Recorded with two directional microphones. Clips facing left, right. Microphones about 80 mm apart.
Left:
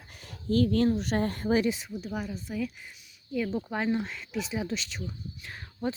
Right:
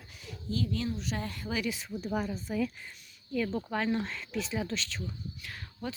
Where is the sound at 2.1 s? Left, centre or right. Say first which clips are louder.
Right 2 dB; centre.